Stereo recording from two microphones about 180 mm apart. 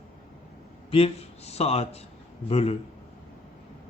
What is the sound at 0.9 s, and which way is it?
A man's voice, 35° left (ahead or behind).